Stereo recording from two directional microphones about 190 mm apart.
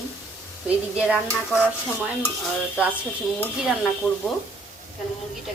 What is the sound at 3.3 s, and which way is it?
Speech, 5° left (ahead or behind).